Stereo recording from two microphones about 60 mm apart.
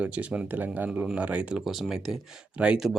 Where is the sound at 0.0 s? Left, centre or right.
Right.